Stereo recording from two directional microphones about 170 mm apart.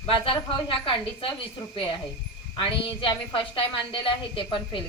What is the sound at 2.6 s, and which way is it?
A woman's voice, 30° left (ahead or behind).